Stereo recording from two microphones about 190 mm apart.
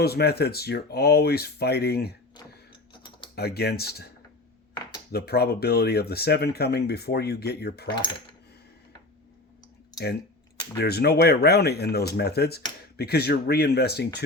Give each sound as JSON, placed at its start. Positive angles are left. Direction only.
{"t": 0.0, "sound": "speech", "side_deg": 55}
{"t": 2.9, "sound": "typing", "side_deg": 25}
{"t": 3.3, "sound": "speech", "side_deg": 55}
{"t": 5.1, "sound": "speech", "side_deg": 60}
{"t": 10.0, "sound": "speech", "side_deg": 20}
{"t": 10.8, "sound": "speech", "side_deg": 55}